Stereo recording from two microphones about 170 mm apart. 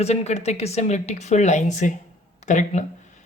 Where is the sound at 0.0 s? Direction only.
40° left (ahead or behind).